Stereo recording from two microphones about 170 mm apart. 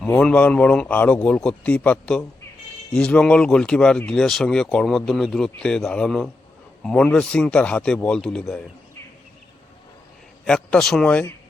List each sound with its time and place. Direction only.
0.0 s a man's voice: 5° left (ahead or behind)
10.4 s speech: 5° left (ahead or behind)